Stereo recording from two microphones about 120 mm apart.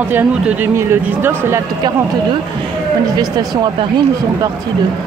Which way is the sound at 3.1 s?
35° right (ahead or behind).